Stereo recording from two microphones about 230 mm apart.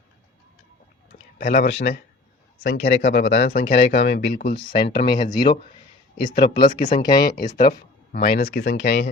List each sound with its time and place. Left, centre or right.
1.4 s speech: left
4.4 s speech: left
4.9 s speech: left
5.1 s speech: centre
6.4 s speech: left
7.0 s speech: centre
7.4 s speech: left